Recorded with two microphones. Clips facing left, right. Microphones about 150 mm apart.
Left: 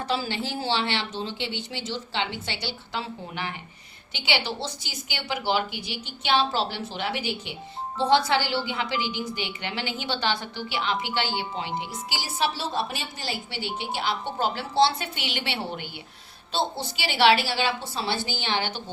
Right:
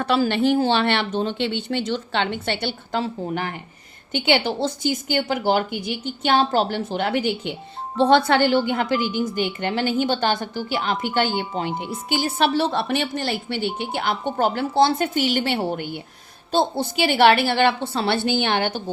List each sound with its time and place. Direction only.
0.0 s a woman's voice: 60° right (ahead or behind)